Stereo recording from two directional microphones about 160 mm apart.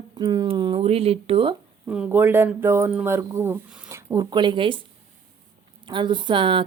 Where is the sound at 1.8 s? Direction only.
10° right (ahead or behind).